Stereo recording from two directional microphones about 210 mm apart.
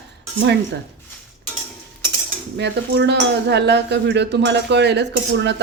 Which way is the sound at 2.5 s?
55° right (ahead or behind).